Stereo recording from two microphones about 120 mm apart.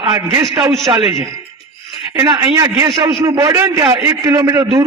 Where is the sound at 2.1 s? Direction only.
40° right (ahead or behind).